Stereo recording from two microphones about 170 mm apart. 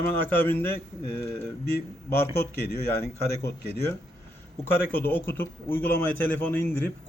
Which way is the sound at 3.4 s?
15° left (ahead or behind).